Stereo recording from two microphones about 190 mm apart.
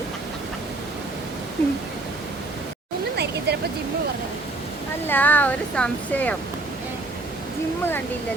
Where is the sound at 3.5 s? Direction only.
60° right (ahead or behind).